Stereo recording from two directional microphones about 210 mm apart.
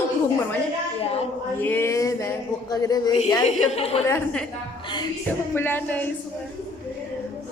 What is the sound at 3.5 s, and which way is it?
Speech, 30° left (ahead or behind).